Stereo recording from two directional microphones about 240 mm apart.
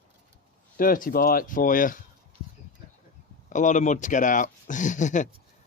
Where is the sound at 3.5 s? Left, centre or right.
Left.